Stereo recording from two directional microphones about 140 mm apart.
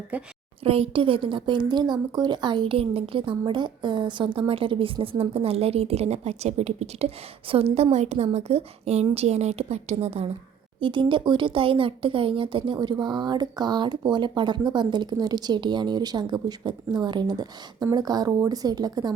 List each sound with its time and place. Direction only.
0.1 s a woman's voice: 10° right (ahead or behind)
0.6 s a woman's voice: 45° right (ahead or behind)
10.8 s speech: 35° right (ahead or behind)